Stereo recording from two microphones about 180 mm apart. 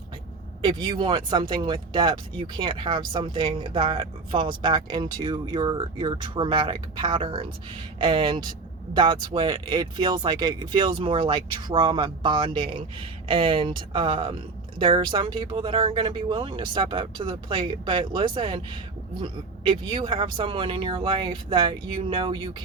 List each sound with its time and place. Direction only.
0.6 s speech: 30° right (ahead or behind)